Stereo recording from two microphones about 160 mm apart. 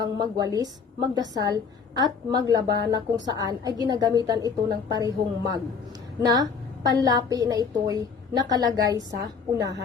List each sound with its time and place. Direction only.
0.0 s a woman's voice: 25° right (ahead or behind)